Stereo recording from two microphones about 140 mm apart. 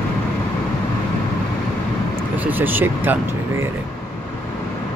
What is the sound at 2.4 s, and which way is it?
Speech, 15° right (ahead or behind).